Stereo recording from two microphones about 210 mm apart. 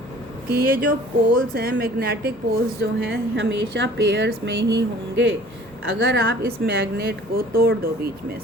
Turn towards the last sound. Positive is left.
turn(degrees=-45)  # may be behind; listen again after turning